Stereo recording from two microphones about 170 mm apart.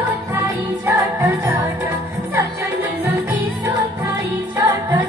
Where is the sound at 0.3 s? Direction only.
15° right (ahead or behind).